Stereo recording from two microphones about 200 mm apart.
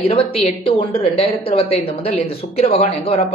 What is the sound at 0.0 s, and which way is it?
A woman's voice, 30° left (ahead or behind).